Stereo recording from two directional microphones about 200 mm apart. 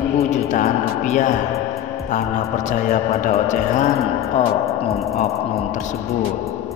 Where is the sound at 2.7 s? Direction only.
40° left (ahead or behind).